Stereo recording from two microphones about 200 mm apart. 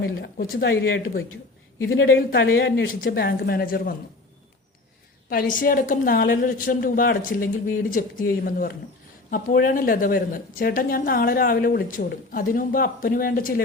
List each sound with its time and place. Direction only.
0.0 s a woman's voice: 50° left (ahead or behind)
5.3 s a woman's voice: 45° left (ahead or behind)